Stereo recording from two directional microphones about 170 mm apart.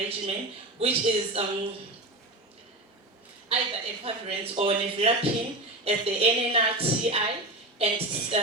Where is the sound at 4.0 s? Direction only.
35° right (ahead or behind).